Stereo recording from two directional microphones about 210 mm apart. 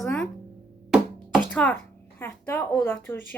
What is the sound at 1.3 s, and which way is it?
Music, 5° left (ahead or behind).